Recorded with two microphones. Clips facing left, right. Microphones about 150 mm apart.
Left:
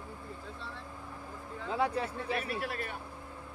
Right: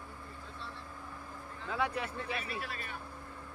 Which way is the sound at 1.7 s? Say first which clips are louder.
Left 3 dB; 30° left (ahead or behind).